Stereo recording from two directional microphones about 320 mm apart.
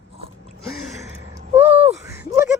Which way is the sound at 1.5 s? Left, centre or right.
Centre.